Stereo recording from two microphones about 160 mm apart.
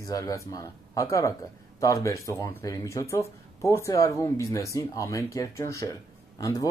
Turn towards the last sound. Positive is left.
turn(degrees=20)  # may be behind; listen again after turning